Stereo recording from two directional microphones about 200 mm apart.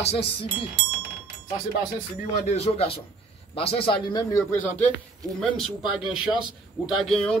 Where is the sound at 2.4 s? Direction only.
35° left (ahead or behind).